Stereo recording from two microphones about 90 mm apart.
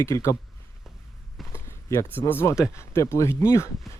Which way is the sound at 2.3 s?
25° left (ahead or behind).